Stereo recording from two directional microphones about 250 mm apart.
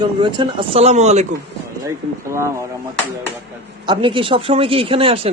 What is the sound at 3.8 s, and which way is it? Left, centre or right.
Speech, centre.